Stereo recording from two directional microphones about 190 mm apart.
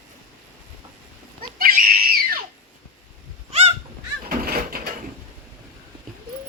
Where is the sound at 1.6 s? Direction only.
50° right (ahead or behind).